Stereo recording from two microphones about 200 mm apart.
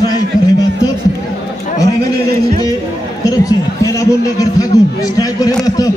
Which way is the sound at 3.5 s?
15° left (ahead or behind).